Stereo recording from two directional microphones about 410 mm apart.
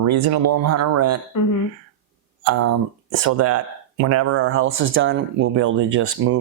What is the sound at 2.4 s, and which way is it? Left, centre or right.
Speech, right.